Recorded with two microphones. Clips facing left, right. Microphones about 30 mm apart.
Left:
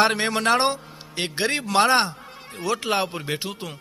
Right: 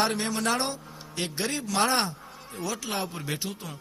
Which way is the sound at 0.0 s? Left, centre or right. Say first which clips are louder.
Left 6 dB; left.